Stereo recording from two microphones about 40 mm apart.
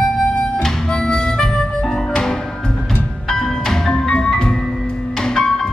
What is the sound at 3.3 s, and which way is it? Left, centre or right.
Music, centre.